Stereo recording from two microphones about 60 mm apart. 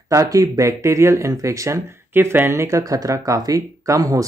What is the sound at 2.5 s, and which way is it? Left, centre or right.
Speech, right.